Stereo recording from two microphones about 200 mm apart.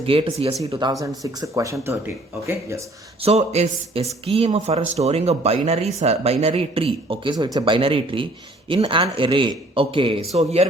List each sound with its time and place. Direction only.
0.0 s speech: 30° right (ahead or behind)
3.2 s speech: 30° right (ahead or behind)